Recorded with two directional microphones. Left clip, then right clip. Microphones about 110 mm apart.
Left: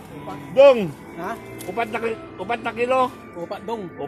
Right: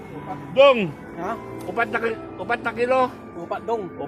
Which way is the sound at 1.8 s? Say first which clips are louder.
Right 2 dB; 20° left (ahead or behind).